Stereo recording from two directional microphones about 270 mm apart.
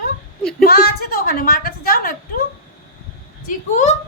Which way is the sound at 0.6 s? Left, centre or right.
Left.